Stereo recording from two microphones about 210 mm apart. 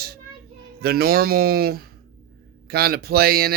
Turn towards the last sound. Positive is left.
turn(degrees=-45)  # may be behind; listen again after turning